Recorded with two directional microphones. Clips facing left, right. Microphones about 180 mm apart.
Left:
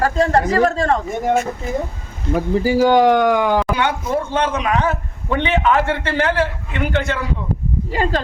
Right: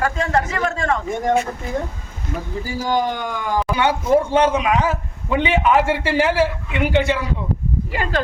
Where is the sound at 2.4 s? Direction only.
70° left (ahead or behind).